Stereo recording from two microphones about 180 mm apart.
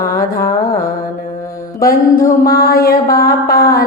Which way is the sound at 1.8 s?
50° left (ahead or behind).